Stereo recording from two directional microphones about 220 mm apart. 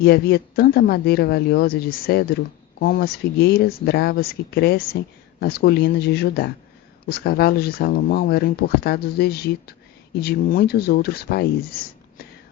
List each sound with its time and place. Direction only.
0.0 s speech: 45° left (ahead or behind)